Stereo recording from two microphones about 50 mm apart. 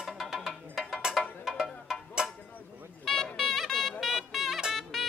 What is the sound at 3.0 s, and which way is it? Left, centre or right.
Music, centre.